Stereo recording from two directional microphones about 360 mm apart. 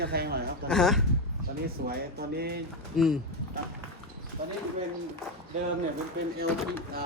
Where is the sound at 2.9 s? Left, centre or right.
Centre.